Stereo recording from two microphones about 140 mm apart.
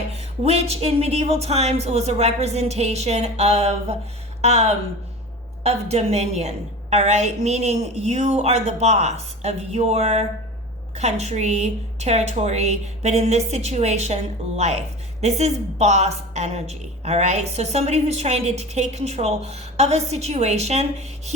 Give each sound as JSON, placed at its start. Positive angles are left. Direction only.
{"t": 0.1, "sound": "a woman's voice", "side_deg": -45}